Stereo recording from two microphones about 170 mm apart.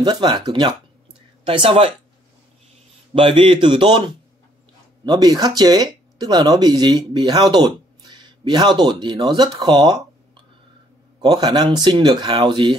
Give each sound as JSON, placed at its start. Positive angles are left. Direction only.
{"t": 0.0, "sound": "speech", "side_deg": -25}
{"t": 3.2, "sound": "speech", "side_deg": -35}
{"t": 5.0, "sound": "speech", "side_deg": -25}
{"t": 11.1, "sound": "speech", "side_deg": -25}